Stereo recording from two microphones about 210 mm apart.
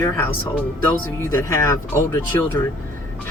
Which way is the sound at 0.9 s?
10° left (ahead or behind).